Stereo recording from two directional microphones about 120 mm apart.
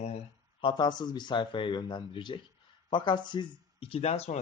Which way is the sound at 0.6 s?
40° left (ahead or behind).